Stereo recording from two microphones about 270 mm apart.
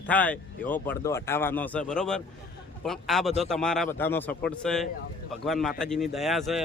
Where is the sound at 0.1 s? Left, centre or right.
Centre.